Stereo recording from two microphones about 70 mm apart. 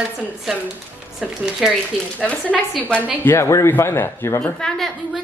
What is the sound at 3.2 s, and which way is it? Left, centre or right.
Speech, left.